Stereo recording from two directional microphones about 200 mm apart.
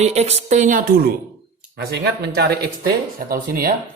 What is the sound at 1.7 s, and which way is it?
Speech, 55° right (ahead or behind).